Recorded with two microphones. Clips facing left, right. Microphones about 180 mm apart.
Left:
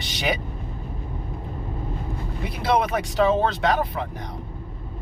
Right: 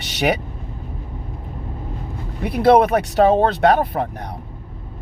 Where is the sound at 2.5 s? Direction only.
60° right (ahead or behind).